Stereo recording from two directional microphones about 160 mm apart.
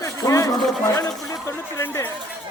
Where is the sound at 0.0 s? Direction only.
20° left (ahead or behind).